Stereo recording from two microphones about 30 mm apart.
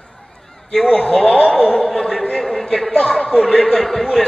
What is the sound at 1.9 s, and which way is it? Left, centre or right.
A man's voice, centre.